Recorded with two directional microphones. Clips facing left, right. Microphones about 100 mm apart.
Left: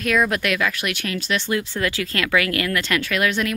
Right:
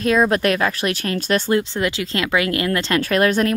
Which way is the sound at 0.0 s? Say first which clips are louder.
Right 4 dB; 30° right (ahead or behind).